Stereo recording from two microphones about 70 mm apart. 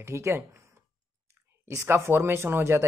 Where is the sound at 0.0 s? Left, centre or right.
Right.